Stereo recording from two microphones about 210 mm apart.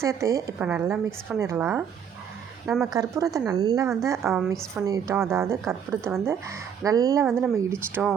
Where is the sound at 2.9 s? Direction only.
15° right (ahead or behind).